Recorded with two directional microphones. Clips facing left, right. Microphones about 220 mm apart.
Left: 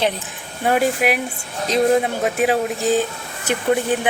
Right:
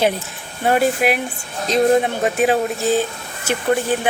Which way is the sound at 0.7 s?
10° left (ahead or behind).